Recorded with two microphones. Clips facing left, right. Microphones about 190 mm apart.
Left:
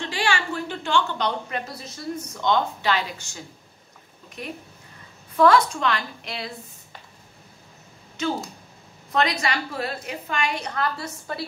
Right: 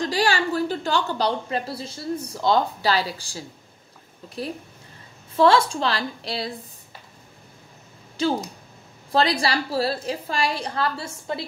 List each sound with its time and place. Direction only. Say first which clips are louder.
0.0 s a woman's voice: right 4 dB; 35° right (ahead or behind)
5.3 s a woman's voice: even; 25° right (ahead or behind)
8.2 s a woman's voice: right 3 dB; 30° right (ahead or behind)